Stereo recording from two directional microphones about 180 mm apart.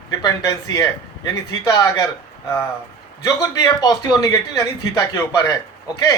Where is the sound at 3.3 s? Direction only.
20° left (ahead or behind).